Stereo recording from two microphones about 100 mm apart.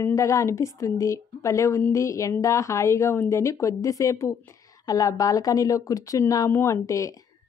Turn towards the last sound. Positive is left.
turn(degrees=30)  # may be behind; listen again after turning